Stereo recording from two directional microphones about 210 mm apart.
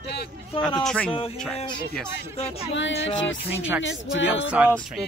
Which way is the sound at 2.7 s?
60° left (ahead or behind).